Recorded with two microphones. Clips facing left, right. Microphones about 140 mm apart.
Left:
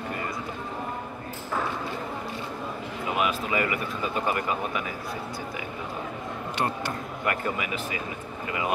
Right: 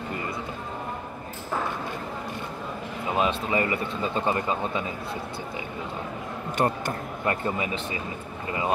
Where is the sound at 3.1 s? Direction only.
30° right (ahead or behind).